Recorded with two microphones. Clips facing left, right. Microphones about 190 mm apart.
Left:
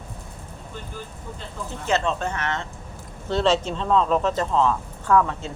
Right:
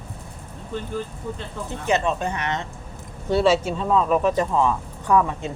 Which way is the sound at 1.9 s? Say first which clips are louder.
Right 1 dB; 15° right (ahead or behind).